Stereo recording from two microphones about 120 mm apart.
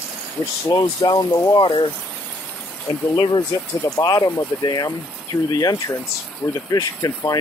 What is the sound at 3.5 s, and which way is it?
Speech, 35° left (ahead or behind).